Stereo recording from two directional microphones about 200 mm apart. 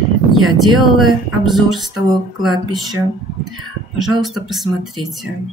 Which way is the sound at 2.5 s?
20° right (ahead or behind).